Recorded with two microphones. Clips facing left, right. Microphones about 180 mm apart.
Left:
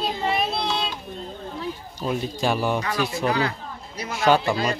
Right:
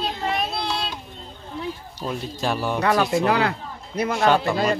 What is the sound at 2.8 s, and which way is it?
Speech, 65° right (ahead or behind).